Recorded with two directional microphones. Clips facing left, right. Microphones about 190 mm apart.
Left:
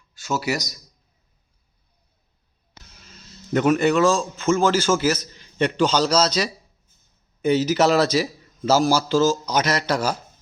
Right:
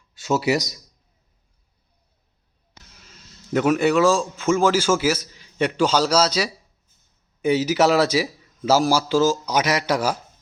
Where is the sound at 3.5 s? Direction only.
5° right (ahead or behind).